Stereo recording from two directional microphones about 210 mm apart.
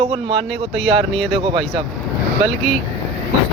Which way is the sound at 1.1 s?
Centre (ahead or behind).